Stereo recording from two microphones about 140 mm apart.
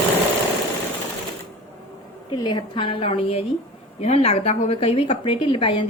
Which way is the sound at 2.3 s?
30° left (ahead or behind).